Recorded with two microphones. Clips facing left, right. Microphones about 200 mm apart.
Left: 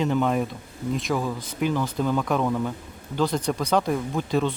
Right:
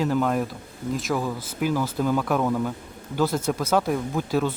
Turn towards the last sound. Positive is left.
turn(degrees=-5)  # may be behind; listen again after turning